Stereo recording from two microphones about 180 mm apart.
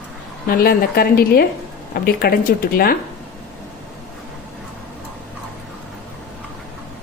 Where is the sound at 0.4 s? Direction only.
55° left (ahead or behind).